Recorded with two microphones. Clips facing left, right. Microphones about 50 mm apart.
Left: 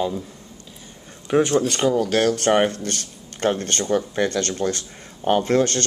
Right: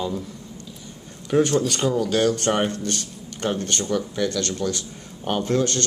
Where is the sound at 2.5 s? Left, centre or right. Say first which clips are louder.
Left 4 dB; left.